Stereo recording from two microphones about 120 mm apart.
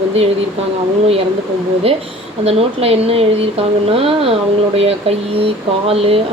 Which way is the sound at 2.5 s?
55° right (ahead or behind).